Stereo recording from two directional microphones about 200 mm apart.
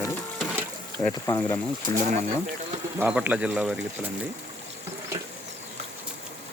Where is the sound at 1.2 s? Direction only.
15° left (ahead or behind).